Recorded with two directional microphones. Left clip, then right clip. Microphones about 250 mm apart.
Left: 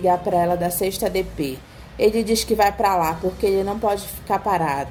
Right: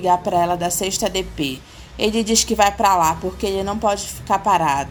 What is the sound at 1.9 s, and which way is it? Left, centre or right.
Speech, right.